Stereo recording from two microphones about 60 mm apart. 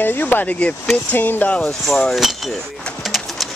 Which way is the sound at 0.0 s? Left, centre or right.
Left.